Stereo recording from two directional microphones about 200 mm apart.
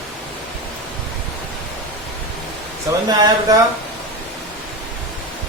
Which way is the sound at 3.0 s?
20° right (ahead or behind).